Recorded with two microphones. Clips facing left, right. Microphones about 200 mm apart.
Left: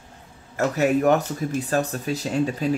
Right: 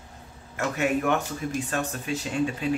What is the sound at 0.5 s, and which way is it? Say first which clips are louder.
Speech: left 5 dB; 40° left (ahead or behind).